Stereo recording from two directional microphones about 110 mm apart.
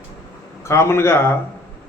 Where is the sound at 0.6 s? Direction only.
25° left (ahead or behind).